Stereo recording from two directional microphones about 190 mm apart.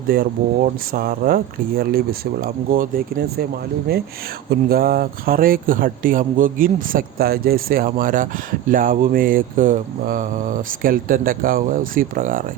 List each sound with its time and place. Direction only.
0.1 s mantra: 50° right (ahead or behind)
4.7 s mantra: 50° right (ahead or behind)